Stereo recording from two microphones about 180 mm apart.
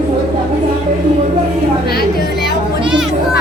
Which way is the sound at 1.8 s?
60° left (ahead or behind).